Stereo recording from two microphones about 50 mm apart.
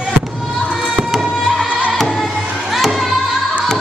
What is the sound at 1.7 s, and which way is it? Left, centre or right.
Music, right.